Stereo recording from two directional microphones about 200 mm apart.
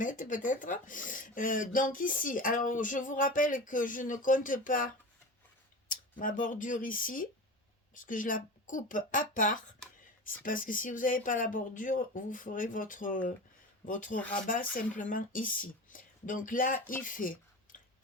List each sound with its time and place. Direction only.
0.0 s speech: 40° left (ahead or behind)
5.9 s speech: 45° left (ahead or behind)
17.0 s a sound: 40° left (ahead or behind)